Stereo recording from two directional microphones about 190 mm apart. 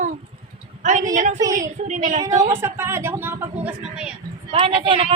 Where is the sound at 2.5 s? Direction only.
15° right (ahead or behind).